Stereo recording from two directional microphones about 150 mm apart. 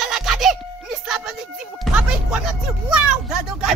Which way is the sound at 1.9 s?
5° right (ahead or behind).